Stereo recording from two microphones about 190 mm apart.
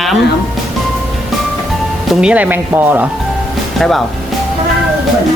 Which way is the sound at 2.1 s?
5° right (ahead or behind).